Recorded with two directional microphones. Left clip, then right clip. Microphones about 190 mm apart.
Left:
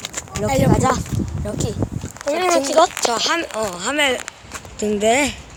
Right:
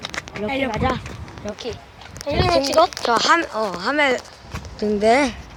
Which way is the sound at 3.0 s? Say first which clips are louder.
Right 2 dB; 10° right (ahead or behind).